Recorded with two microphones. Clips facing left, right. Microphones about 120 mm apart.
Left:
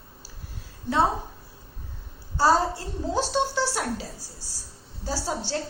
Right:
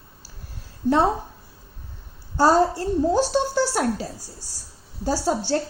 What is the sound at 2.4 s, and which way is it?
A woman's voice, 50° right (ahead or behind).